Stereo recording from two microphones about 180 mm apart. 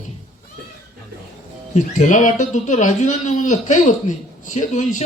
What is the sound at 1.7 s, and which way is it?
Speech, 45° left (ahead or behind).